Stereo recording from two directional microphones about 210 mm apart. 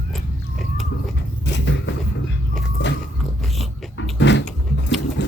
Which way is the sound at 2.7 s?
60° left (ahead or behind).